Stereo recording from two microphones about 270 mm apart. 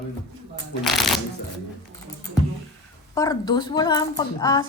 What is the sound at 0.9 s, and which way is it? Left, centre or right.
Speech, centre.